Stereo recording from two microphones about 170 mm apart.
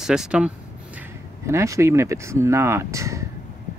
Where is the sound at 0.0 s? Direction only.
5° right (ahead or behind).